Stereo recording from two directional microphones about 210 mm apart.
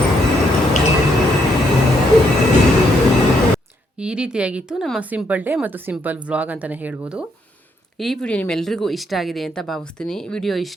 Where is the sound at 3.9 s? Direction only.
5° right (ahead or behind).